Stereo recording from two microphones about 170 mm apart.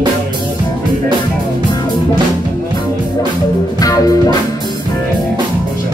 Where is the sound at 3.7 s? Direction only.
20° left (ahead or behind).